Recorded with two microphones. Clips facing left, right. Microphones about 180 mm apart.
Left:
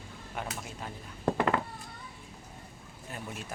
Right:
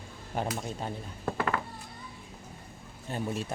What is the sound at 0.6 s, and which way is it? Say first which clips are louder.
Speech: right 6 dB; 30° right (ahead or behind).